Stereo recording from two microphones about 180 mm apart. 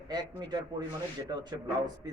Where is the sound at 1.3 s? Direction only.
25° right (ahead or behind).